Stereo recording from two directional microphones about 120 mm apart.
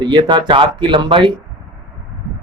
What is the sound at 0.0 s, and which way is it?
A man's voice, 40° right (ahead or behind).